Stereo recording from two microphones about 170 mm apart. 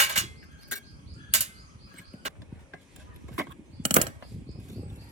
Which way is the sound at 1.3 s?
40° right (ahead or behind).